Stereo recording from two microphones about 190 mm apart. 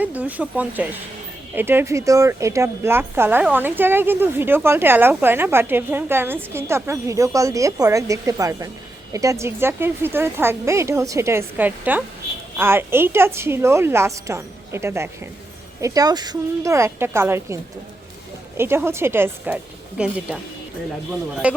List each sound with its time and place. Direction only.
0.0 s a woman's voice: 10° right (ahead or behind)
21.4 s a woman's voice: 5° right (ahead or behind)